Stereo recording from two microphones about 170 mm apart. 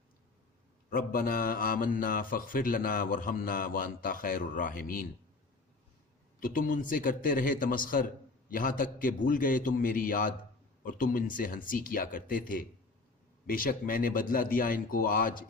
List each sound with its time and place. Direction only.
0.9 s speech: 60° left (ahead or behind)
6.4 s speech: 55° left (ahead or behind)